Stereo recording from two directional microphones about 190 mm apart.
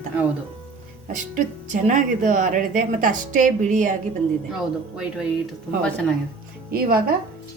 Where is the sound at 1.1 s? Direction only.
40° right (ahead or behind).